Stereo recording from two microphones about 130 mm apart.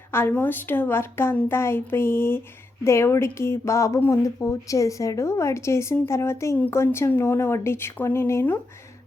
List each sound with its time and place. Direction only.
0.1 s a woman's voice: 15° left (ahead or behind)